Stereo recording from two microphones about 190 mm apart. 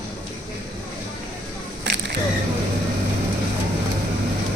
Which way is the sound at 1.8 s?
65° right (ahead or behind).